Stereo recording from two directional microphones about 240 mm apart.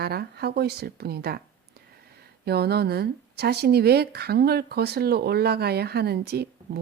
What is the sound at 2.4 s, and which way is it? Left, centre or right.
Speech, right.